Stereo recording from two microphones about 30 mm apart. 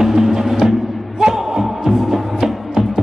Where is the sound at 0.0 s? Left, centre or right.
Centre.